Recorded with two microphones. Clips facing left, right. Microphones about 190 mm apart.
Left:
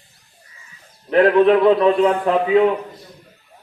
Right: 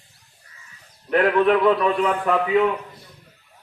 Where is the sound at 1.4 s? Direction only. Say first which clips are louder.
Left 4 dB; 25° left (ahead or behind).